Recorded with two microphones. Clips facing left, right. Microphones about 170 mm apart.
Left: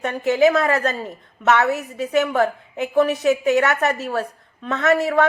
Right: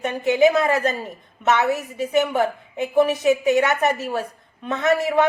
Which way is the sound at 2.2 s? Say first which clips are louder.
Left 1 dB; 20° right (ahead or behind).